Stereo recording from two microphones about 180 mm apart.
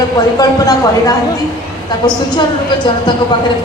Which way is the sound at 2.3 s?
25° left (ahead or behind).